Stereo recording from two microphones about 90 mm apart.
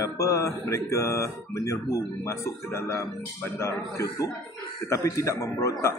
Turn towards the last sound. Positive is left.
turn(degrees=35)  # may be behind; listen again after turning